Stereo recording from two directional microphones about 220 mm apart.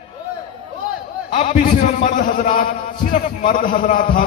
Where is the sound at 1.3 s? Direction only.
35° left (ahead or behind).